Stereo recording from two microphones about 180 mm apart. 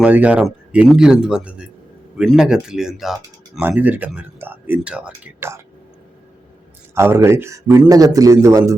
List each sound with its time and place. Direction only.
0.0 s speech: 5° right (ahead or behind)
6.9 s speech: 15° right (ahead or behind)